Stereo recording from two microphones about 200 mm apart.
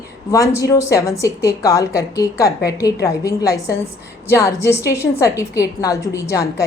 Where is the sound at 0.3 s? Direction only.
15° left (ahead or behind).